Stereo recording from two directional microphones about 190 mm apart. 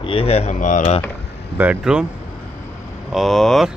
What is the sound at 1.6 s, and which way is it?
Speech, 5° right (ahead or behind).